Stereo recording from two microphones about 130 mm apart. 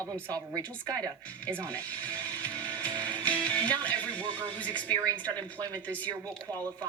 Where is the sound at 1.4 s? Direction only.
10° left (ahead or behind).